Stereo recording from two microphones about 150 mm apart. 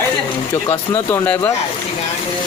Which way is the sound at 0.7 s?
20° left (ahead or behind).